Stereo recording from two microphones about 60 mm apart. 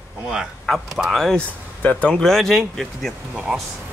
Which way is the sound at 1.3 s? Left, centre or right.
Left.